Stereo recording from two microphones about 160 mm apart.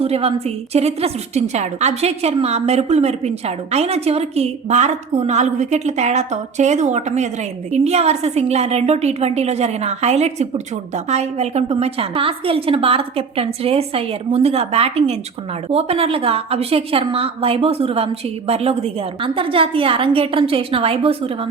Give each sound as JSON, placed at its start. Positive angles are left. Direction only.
{"t": 0.0, "sound": "a woman's voice", "side_deg": -40}